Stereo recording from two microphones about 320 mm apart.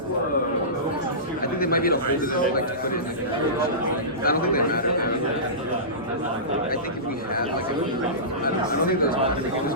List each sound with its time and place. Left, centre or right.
1.5 s a man's voice: left
4.2 s a man's voice: left